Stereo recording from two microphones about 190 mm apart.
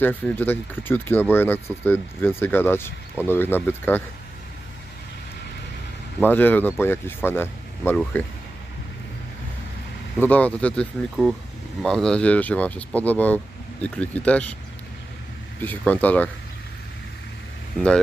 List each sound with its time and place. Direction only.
0.0 s speech: 10° left (ahead or behind)
6.1 s speech: 10° left (ahead or behind)
10.2 s speech: 5° left (ahead or behind)
15.6 s speech: 10° left (ahead or behind)
17.7 s speech: 5° left (ahead or behind)